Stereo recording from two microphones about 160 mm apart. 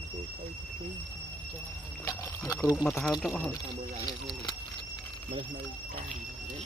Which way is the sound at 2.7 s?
Centre (ahead or behind).